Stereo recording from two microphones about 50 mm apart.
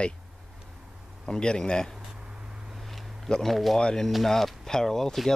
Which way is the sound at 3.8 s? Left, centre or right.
Centre.